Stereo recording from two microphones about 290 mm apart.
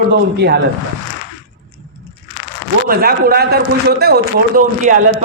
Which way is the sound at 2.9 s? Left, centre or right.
Right.